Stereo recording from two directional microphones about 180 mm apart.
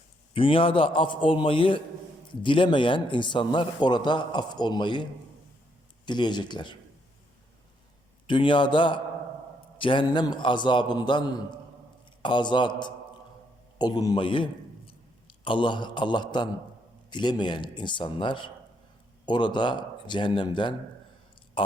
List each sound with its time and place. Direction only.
0.3 s a man's voice: 30° left (ahead or behind)
6.1 s a man's voice: 25° left (ahead or behind)
8.3 s a man's voice: 25° left (ahead or behind)